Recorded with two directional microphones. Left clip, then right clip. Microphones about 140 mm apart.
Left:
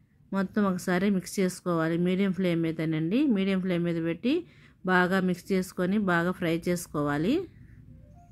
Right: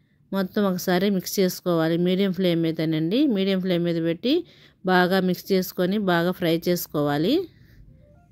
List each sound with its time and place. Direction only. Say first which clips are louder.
0.3 s speech: right 5 dB; 20° right (ahead or behind)